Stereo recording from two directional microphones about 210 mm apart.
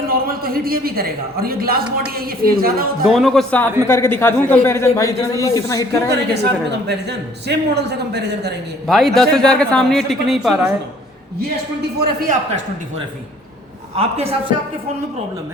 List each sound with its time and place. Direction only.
0.1 s speech: 45° right (ahead or behind)
3.1 s a woman's voice: centre (ahead or behind); by 6.0 s 15° left (ahead or behind)
6.1 s speech: 50° right (ahead or behind)
8.9 s a woman's voice: centre (ahead or behind)
11.3 s speech: 50° right (ahead or behind)
13.9 s a man's voice: 30° right (ahead or behind)